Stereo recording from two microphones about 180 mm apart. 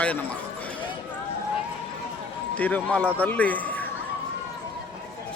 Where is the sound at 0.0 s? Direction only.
10° left (ahead or behind).